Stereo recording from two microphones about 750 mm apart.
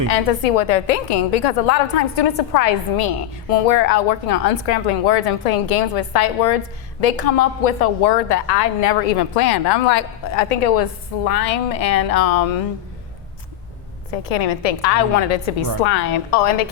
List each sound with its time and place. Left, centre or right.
0.1 s a woman's voice: left
14.1 s a woman's voice: left